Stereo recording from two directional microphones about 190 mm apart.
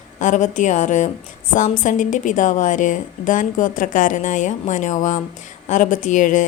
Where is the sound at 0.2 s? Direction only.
40° left (ahead or behind).